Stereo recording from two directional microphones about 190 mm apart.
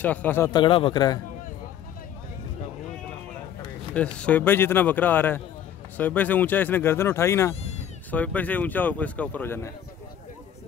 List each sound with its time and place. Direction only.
0.0 s speech: 10° left (ahead or behind)
0.5 s a man's voice: 25° left (ahead or behind)
3.9 s speech: 5° left (ahead or behind)